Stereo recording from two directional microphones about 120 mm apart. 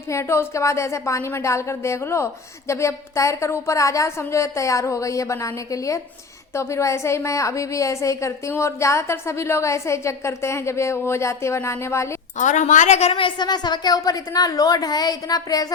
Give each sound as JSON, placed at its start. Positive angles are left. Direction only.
{"t": 0.1, "sound": "a woman's voice", "side_deg": 25}
{"t": 12.4, "sound": "a woman's voice", "side_deg": 90}